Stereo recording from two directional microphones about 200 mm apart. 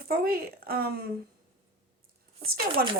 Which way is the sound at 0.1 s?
50° right (ahead or behind).